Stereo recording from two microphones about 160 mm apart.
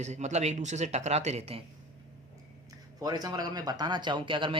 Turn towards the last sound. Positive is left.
turn(degrees=-30)  # may be behind; listen again after turning